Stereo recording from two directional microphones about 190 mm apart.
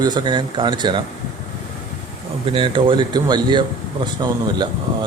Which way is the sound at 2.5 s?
25° right (ahead or behind).